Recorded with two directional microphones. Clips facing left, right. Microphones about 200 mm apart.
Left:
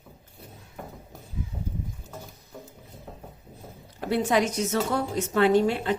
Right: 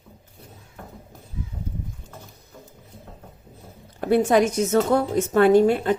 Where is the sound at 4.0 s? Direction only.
50° right (ahead or behind).